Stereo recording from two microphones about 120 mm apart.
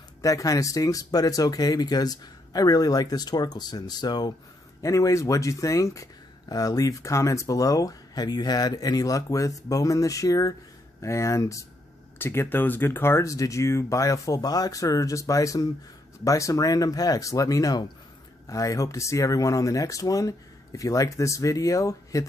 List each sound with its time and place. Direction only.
0.2 s speech: 30° left (ahead or behind)